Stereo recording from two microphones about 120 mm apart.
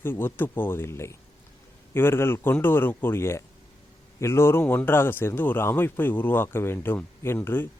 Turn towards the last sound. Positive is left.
turn(degrees=20)  # may be behind; listen again after turning